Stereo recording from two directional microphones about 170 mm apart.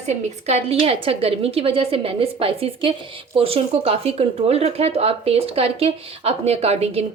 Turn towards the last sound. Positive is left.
turn(degrees=-40)  # may be behind; listen again after turning